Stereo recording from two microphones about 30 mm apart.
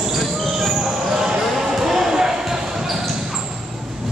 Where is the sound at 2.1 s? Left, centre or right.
Centre.